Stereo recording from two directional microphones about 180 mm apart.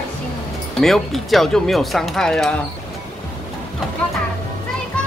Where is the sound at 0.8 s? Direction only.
Centre (ahead or behind).